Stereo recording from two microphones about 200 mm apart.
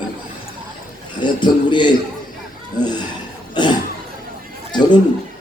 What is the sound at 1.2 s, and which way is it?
A man's voice, 25° left (ahead or behind).